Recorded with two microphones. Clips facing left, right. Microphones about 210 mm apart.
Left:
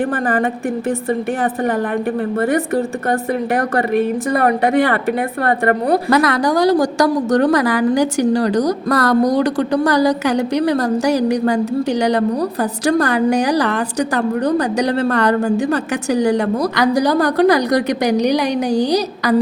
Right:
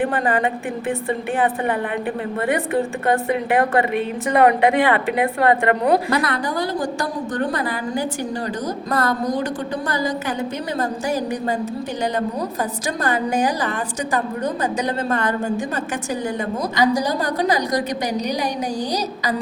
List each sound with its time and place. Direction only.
0.1 s a woman's voice: 45° left (ahead or behind)
2.4 s a woman's voice: 40° left (ahead or behind)
6.1 s a woman's voice: 90° left; by 19.4 s 65° left (ahead or behind)